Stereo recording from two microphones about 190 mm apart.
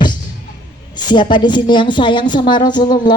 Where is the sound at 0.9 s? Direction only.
25° left (ahead or behind).